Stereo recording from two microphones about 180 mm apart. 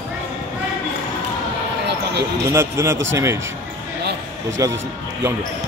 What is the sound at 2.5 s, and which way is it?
Speech, 15° right (ahead or behind).